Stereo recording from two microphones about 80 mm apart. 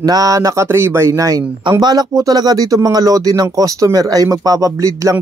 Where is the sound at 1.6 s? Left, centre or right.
Right.